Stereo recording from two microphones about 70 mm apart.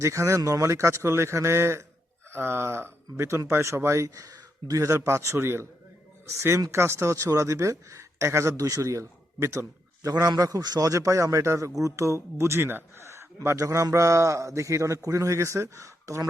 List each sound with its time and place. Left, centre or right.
0.0 s a man's voice: right
10.1 s a man's voice: right